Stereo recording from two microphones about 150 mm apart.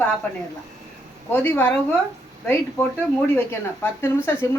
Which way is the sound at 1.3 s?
15° left (ahead or behind).